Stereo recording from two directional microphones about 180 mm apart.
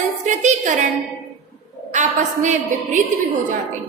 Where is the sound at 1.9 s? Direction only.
40° right (ahead or behind).